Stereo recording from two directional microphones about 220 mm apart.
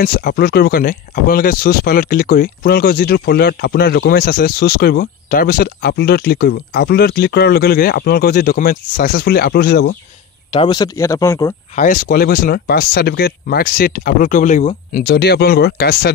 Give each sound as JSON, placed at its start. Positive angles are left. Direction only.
{"t": 0.0, "sound": "speech", "side_deg": 40}
{"t": 10.5, "sound": "speech", "side_deg": 20}
{"t": 11.7, "sound": "speech", "side_deg": 35}